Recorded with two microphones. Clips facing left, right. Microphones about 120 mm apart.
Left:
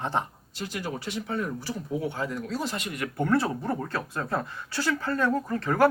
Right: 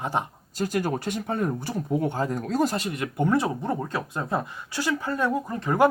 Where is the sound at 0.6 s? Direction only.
50° right (ahead or behind).